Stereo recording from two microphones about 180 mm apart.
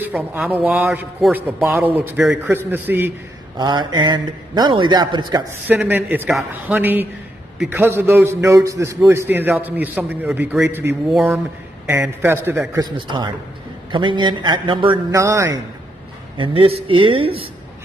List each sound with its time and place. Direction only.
0.0 s a man's voice: 10° right (ahead or behind)
2.3 s a man's voice: 10° right (ahead or behind)
3.5 s a man's voice: 25° right (ahead or behind)
5.7 s a man's voice: 10° right (ahead or behind)
12.8 s a man's voice: 25° right (ahead or behind)
15.1 s a man's voice: 15° right (ahead or behind)
16.3 s a man's voice: 30° right (ahead or behind)